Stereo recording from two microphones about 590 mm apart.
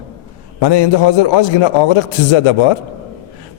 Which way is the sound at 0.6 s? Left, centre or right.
Left.